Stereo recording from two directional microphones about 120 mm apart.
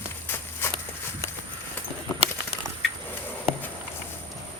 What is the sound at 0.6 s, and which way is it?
Horse, 20° left (ahead or behind).